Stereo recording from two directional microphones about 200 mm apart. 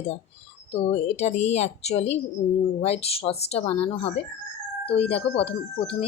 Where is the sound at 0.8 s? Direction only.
30° left (ahead or behind).